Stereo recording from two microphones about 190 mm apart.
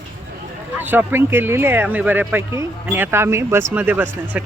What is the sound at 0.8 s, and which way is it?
Speech, 10° right (ahead or behind).